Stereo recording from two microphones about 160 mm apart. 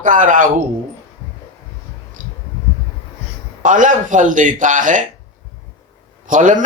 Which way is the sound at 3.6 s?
55° right (ahead or behind).